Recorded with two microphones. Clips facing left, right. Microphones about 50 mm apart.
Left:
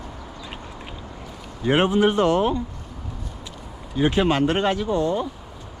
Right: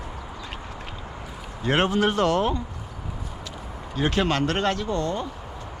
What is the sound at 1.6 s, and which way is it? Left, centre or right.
Speech, centre.